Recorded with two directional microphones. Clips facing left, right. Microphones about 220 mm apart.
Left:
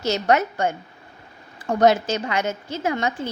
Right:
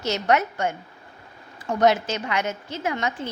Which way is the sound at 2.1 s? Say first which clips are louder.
Left 3 dB; 30° left (ahead or behind).